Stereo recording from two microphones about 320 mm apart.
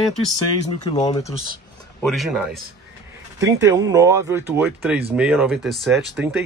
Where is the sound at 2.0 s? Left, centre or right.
Centre.